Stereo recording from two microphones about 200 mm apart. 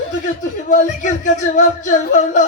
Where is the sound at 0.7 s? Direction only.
40° left (ahead or behind).